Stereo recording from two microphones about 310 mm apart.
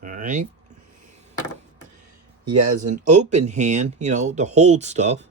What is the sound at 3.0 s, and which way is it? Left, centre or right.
Speech, right.